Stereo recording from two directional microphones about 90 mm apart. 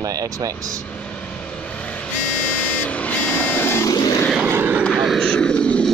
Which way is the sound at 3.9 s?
45° left (ahead or behind).